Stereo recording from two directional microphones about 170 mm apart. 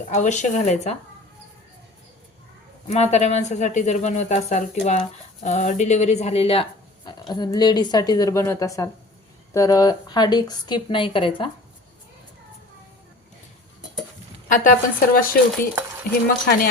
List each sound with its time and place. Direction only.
0.1 s a woman's voice: 45° left (ahead or behind)
2.8 s a woman's voice: 40° left (ahead or behind)
14.4 s a woman's voice: 55° left (ahead or behind)